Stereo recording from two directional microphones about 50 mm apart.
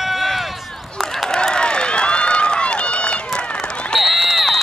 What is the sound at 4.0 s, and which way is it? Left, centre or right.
Run, centre.